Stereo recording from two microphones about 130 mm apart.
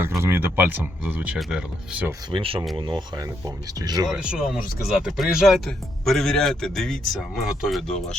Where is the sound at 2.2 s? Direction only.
40° right (ahead or behind).